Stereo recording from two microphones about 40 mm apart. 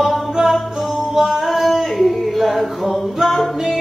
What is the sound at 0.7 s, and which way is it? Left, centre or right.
Singing, centre.